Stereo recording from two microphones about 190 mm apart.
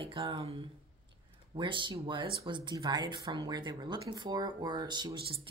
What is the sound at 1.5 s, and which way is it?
Speech, 25° right (ahead or behind).